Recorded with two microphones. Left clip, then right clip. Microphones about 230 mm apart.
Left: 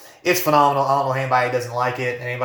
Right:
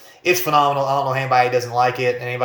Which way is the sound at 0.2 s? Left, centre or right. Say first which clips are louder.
Even; centre.